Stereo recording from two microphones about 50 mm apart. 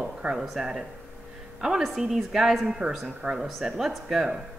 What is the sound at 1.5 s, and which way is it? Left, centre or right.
A woman's voice, centre.